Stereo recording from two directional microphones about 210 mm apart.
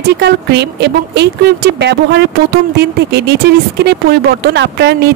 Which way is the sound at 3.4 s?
50° right (ahead or behind).